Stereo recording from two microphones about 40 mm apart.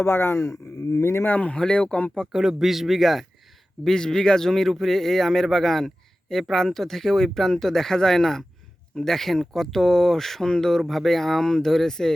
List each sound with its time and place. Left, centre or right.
0.1 s speech: left
1.2 s speech: left
1.5 s speech: left
2.3 s speech: centre
3.8 s speech: centre